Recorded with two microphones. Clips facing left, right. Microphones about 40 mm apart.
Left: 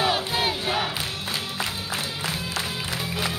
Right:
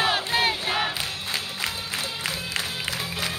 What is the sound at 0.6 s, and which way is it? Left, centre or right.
Crowd, centre.